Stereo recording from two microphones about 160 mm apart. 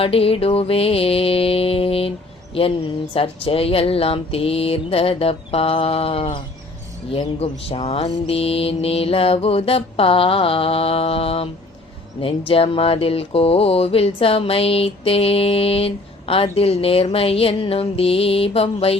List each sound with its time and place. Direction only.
0.0 s mantra: 35° left (ahead or behind)
3.2 s mantra: 35° left (ahead or behind)